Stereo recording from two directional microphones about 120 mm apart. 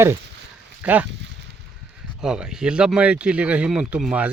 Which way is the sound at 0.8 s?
15° right (ahead or behind).